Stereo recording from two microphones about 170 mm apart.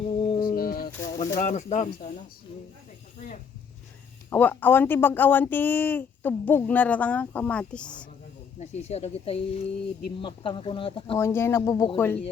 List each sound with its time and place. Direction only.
0.3 s music: 25° left (ahead or behind)
0.5 s music: 60° left (ahead or behind)
1.2 s speech: 45° left (ahead or behind)
4.3 s speech: 10° left (ahead or behind)
8.5 s speech: 40° left (ahead or behind)
11.2 s speech: 15° left (ahead or behind)